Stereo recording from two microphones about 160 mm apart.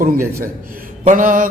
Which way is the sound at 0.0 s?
60° right (ahead or behind).